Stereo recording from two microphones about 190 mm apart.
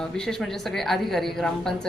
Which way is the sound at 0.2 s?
Centre (ahead or behind).